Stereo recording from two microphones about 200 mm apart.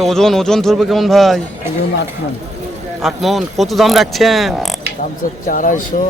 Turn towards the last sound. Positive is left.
turn(degrees=40)  # may be behind; listen again after turning